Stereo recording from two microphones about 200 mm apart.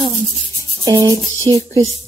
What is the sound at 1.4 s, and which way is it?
Music, 15° left (ahead or behind).